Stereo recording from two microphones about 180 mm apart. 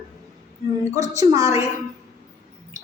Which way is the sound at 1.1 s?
15° right (ahead or behind).